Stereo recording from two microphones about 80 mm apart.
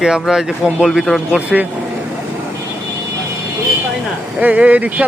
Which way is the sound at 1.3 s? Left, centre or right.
Centre.